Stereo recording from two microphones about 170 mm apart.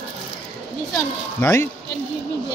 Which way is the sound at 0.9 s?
15° left (ahead or behind).